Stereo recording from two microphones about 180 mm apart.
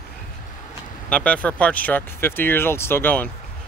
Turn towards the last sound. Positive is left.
turn(degrees=10)  # may be behind; listen again after turning